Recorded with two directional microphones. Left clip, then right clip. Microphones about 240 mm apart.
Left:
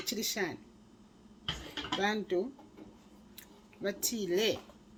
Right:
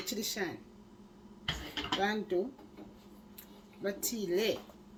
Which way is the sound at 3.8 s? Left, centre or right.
Left.